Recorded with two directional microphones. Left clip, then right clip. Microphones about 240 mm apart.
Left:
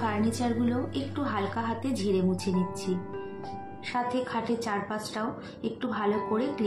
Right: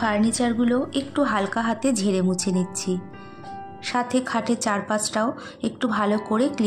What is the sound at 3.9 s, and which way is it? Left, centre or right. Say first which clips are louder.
A woman's voice: right 6 dB; right.